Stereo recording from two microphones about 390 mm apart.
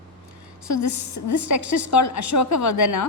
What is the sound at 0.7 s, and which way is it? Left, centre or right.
A woman's voice, left.